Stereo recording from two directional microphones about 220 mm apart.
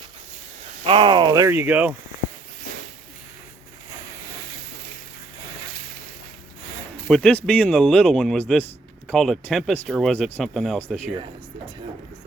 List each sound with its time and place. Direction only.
0.9 s speech: 20° right (ahead or behind)
7.1 s speech: 5° left (ahead or behind)